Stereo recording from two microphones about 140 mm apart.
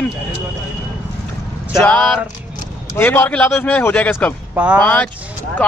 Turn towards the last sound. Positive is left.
turn(degrees=10)  # may be behind; listen again after turning